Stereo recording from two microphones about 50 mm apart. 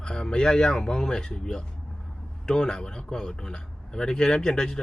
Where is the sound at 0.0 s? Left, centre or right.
Centre.